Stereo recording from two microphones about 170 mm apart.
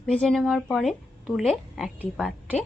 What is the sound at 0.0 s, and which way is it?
A woman's voice, centre (ahead or behind).